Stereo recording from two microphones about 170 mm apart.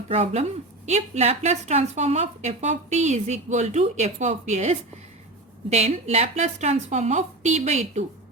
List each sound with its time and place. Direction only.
0.1 s a woman's voice: 35° right (ahead or behind)